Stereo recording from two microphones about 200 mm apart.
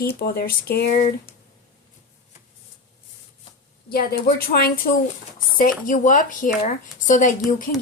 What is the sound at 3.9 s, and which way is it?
Speech, 50° left (ahead or behind).